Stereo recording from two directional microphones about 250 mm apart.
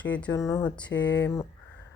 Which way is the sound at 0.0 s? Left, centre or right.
Centre.